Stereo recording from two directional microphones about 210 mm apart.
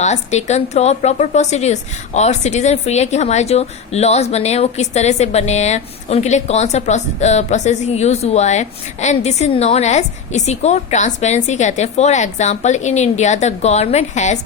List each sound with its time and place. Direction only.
0.0 s a woman's voice: 35° left (ahead or behind)